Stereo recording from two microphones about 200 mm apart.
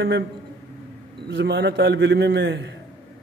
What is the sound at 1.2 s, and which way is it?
A man's voice, 60° right (ahead or behind).